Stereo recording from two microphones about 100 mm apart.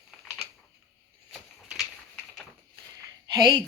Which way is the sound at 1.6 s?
Centre (ahead or behind).